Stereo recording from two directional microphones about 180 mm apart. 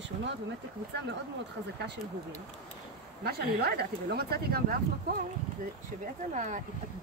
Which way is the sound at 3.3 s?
60° right (ahead or behind).